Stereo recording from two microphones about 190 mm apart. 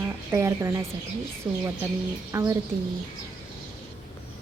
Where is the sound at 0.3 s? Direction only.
15° right (ahead or behind).